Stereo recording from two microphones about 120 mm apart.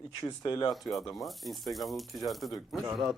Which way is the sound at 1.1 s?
Centre (ahead or behind).